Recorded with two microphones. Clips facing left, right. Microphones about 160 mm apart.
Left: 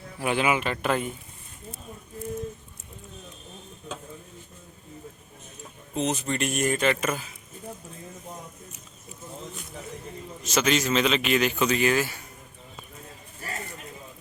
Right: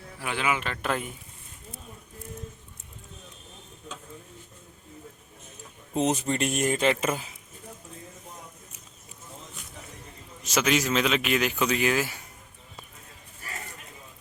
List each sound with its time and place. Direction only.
0.2 s speech: 15° left (ahead or behind); by 1.1 s centre (ahead or behind)
5.9 s speech: 35° right (ahead or behind)
10.4 s a man's voice: 10° right (ahead or behind)